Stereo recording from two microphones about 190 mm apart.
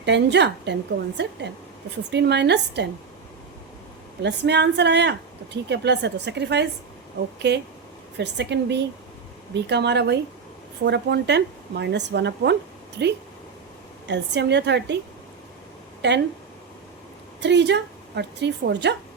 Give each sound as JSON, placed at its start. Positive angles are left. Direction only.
{"t": 0.0, "sound": "speech", "side_deg": -65}
{"t": 4.2, "sound": "speech", "side_deg": -65}
{"t": 14.1, "sound": "speech", "side_deg": -65}
{"t": 16.0, "sound": "speech", "side_deg": -65}
{"t": 17.4, "sound": "speech", "side_deg": -65}